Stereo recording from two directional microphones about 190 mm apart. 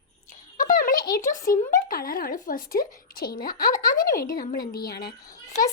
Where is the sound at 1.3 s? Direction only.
45° left (ahead or behind).